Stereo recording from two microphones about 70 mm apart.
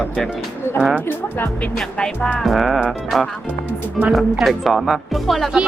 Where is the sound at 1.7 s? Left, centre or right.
Centre.